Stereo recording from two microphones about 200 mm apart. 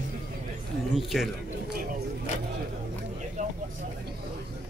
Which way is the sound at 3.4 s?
35° right (ahead or behind).